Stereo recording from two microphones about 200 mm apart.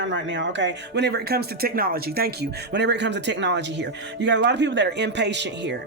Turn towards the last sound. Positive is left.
turn(degrees=-60)  # may be behind; listen again after turning